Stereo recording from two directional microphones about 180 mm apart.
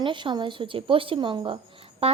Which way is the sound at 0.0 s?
25° right (ahead or behind).